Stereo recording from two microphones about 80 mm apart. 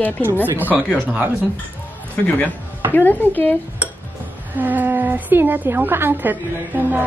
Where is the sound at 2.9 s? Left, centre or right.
Left.